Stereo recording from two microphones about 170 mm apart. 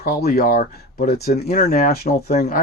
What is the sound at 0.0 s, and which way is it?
Speech, 65° left (ahead or behind).